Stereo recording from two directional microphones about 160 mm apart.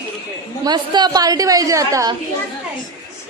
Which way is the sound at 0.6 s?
25° right (ahead or behind).